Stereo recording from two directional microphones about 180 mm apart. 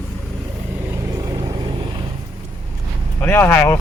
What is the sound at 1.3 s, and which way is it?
Vehicle, 20° right (ahead or behind).